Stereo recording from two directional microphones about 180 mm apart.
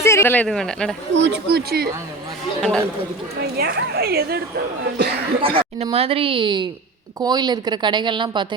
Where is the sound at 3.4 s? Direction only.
60° right (ahead or behind).